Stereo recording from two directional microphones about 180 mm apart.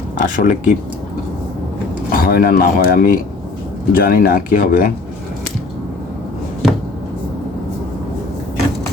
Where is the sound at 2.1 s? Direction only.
55° left (ahead or behind).